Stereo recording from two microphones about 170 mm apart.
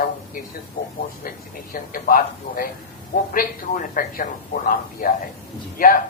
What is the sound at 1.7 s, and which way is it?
Speech, 55° left (ahead or behind).